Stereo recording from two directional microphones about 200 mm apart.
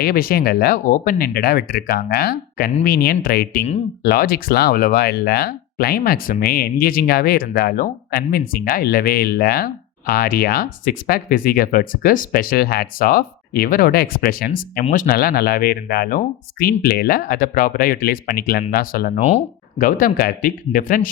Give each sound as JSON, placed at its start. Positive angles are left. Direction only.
{"t": 0.0, "sound": "speech", "side_deg": 50}